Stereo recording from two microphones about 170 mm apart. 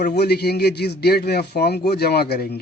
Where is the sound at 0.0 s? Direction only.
75° left (ahead or behind).